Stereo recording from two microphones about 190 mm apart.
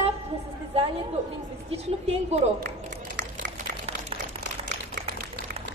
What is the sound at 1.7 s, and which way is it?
Speech, 35° right (ahead or behind).